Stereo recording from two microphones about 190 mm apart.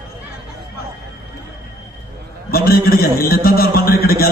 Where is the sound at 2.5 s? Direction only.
50° left (ahead or behind).